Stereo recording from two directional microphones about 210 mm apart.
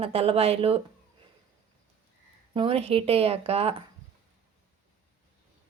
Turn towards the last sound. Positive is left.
turn(degrees=-30)  # may be behind; listen again after turning